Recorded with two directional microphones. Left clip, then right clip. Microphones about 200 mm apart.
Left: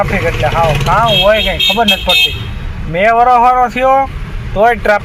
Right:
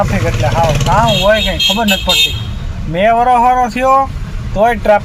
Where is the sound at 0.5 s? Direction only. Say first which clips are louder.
Right 1 dB; 10° right (ahead or behind).